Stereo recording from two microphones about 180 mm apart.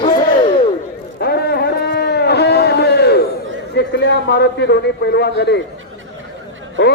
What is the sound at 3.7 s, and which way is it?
A man's voice, 75° left (ahead or behind).